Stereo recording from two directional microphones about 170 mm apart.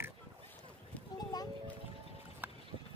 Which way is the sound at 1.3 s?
20° left (ahead or behind).